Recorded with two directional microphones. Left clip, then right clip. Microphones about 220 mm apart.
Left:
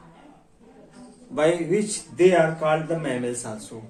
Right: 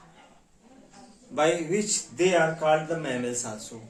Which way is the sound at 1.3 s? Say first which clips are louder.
Left 3 dB; 10° right (ahead or behind).